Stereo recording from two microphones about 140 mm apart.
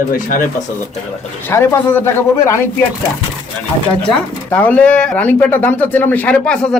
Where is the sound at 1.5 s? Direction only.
20° left (ahead or behind).